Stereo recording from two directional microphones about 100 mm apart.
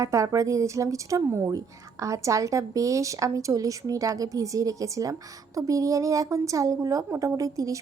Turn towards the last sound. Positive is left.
turn(degrees=-35)  # may be behind; listen again after turning